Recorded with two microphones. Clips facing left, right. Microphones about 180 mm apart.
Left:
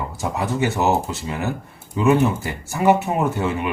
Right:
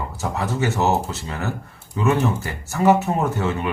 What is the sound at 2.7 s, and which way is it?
Speech, 15° left (ahead or behind).